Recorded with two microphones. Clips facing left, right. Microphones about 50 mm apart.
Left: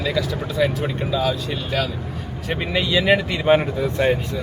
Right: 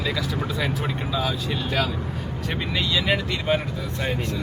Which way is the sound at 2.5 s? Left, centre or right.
Centre.